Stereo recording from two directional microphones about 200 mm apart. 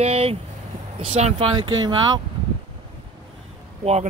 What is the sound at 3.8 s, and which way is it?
Speech, 35° right (ahead or behind).